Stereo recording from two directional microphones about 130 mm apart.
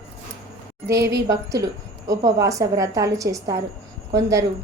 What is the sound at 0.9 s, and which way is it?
A woman's voice, 25° right (ahead or behind).